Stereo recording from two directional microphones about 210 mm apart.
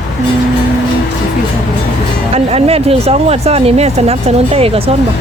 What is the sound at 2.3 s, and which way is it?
Speech, 30° right (ahead or behind).